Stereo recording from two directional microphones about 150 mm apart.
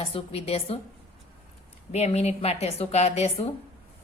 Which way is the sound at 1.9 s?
45° left (ahead or behind).